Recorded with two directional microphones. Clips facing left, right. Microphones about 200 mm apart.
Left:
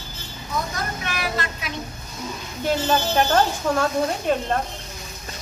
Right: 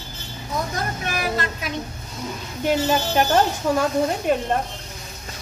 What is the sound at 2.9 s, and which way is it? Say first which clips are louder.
Speech: left 2 dB; 10° right (ahead or behind).